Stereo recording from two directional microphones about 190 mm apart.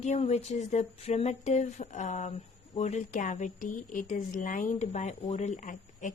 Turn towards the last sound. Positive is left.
turn(degrees=40)  # may be behind; listen again after turning